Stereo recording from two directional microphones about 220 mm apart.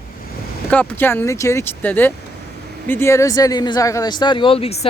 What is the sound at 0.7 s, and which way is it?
Speech, 10° left (ahead or behind).